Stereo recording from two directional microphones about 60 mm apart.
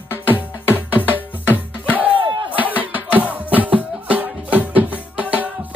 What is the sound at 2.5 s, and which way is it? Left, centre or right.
Music, right.